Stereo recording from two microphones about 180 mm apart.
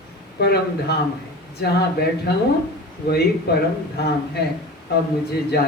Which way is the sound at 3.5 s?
65° left (ahead or behind).